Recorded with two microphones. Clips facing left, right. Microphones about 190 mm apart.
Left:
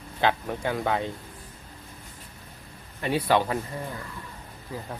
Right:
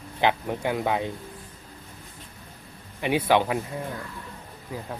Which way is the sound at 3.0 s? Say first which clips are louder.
Right 2 dB; 10° right (ahead or behind).